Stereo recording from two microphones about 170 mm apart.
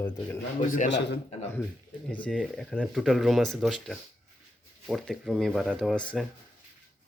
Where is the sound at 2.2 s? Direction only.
5° left (ahead or behind).